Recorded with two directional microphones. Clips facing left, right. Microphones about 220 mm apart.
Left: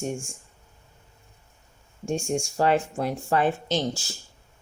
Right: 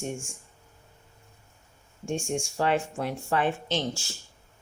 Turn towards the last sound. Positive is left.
turn(degrees=40)  # may be behind; listen again after turning